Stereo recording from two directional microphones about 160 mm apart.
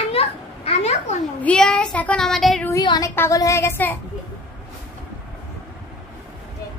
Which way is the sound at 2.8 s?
25° left (ahead or behind).